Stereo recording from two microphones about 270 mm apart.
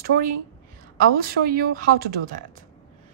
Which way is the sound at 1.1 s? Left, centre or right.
Right.